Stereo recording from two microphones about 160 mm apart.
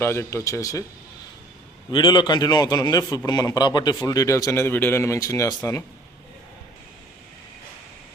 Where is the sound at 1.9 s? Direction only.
30° left (ahead or behind).